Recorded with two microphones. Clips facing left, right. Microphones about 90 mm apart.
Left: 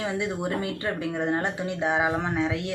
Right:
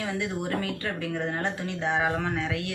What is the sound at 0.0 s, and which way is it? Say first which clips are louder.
Speech: left 2 dB; 20° left (ahead or behind).